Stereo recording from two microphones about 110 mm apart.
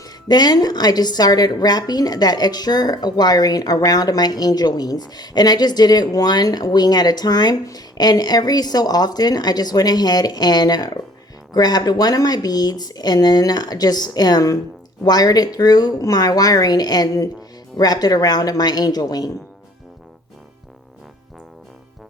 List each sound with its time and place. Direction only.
0.0 s a woman's voice: 40° left (ahead or behind)